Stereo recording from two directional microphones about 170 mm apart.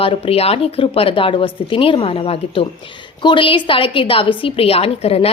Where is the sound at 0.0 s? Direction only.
35° left (ahead or behind).